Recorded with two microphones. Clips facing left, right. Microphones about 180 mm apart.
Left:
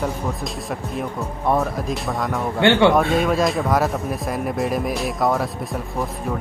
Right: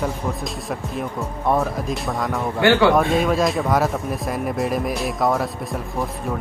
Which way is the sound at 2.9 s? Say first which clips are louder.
Even; centre (ahead or behind).